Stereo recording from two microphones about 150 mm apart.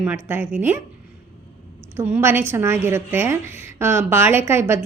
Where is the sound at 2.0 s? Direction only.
15° right (ahead or behind).